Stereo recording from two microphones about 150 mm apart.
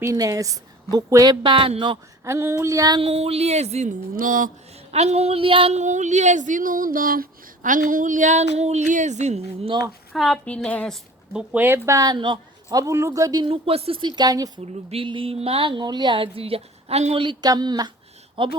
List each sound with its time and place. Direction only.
0.0 s a woman's voice: 20° right (ahead or behind)
2.2 s a woman's voice: 20° right (ahead or behind)
3.0 s speech: 40° right (ahead or behind)
4.2 s a woman's voice: 65° right (ahead or behind)
4.9 s a woman's voice: 45° right (ahead or behind)
10.2 s a woman's voice: 5° left (ahead or behind)
11.5 s a woman's voice: 15° right (ahead or behind)
13.4 s speech: 40° right (ahead or behind)
14.2 s a woman's voice: 25° right (ahead or behind)
14.6 s speech: 40° right (ahead or behind)